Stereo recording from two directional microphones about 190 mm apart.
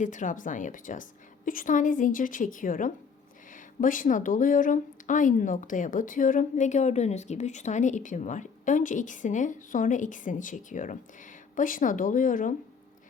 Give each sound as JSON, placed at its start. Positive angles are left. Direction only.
{"t": 0.0, "sound": "speech", "side_deg": 40}